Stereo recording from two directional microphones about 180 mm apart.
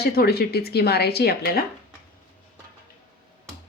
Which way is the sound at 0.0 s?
60° left (ahead or behind).